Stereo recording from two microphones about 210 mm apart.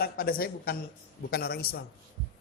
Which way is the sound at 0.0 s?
45° left (ahead or behind).